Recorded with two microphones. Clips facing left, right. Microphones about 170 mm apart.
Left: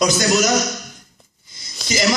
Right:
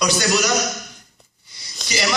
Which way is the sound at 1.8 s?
5° left (ahead or behind).